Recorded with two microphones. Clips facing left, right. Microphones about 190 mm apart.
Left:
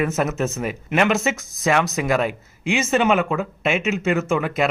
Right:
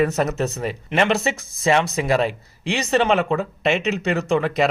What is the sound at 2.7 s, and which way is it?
Speech, centre (ahead or behind).